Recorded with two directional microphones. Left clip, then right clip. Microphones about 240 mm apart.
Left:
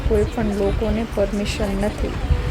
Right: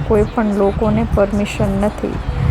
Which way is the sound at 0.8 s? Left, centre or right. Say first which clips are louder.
Right 6 dB; right.